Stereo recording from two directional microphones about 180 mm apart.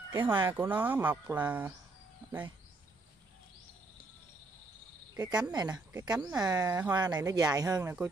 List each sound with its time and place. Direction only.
0.3 s speech: 25° right (ahead or behind)
0.6 s speech: 10° right (ahead or behind)
5.1 s speech: 20° right (ahead or behind)